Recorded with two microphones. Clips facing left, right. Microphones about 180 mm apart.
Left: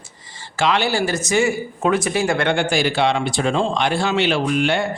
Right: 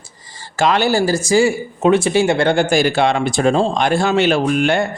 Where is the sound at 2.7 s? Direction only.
45° right (ahead or behind).